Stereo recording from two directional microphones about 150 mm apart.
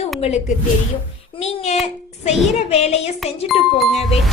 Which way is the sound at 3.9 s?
45° left (ahead or behind).